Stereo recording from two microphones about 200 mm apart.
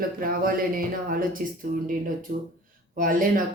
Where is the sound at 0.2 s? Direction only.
45° right (ahead or behind).